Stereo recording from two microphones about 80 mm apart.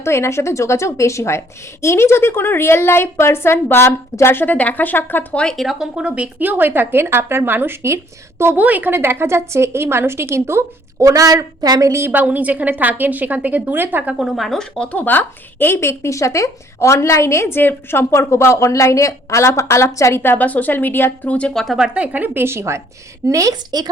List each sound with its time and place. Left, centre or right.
0.0 s a woman's voice: left
5.4 s speech: centre
5.6 s a woman's voice: centre; by 10.6 s right
11.0 s a woman's voice: right
11.9 s a woman's voice: right
12.1 s speech: right
14.2 s speech: centre
14.9 s a woman's voice: left
21.3 s speech: centre
21.8 s a woman's voice: centre; by 23.9 s right